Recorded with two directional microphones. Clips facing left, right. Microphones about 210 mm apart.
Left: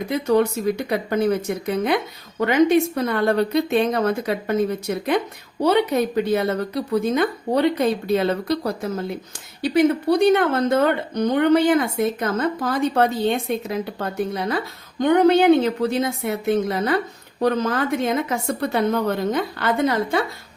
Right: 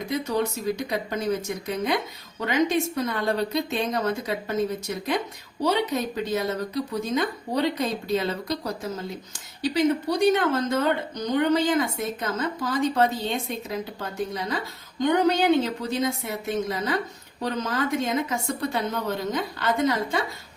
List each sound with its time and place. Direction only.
0.1 s a woman's voice: 60° left (ahead or behind)